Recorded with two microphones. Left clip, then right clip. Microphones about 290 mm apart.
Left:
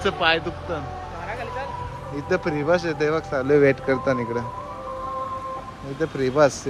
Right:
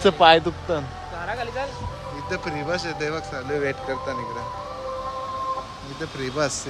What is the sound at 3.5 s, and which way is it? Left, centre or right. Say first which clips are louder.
Speech: left 8 dB; centre.